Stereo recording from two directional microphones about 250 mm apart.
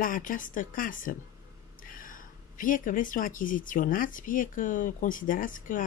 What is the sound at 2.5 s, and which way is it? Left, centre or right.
Speech, left.